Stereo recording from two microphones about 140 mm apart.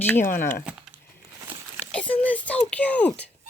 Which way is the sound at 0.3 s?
75° left (ahead or behind).